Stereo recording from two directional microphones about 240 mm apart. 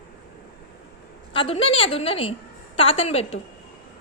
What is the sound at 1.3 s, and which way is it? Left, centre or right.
A woman's voice, left.